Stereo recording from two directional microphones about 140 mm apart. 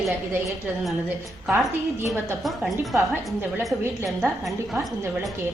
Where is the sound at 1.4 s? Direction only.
15° right (ahead or behind).